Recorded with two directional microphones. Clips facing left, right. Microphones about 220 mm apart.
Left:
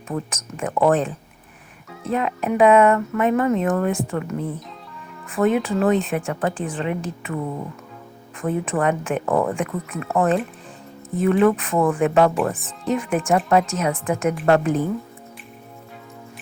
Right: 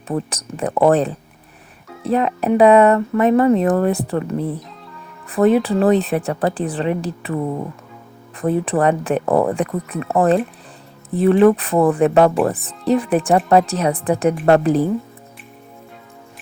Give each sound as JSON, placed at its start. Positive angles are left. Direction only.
{"t": 0.1, "sound": "speech", "side_deg": -35}
{"t": 8.4, "sound": "speech", "side_deg": -35}